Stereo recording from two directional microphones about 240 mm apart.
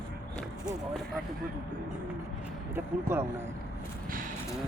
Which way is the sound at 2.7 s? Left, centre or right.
Centre.